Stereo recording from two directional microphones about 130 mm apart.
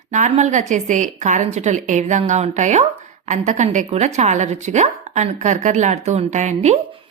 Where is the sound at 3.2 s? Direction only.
70° right (ahead or behind).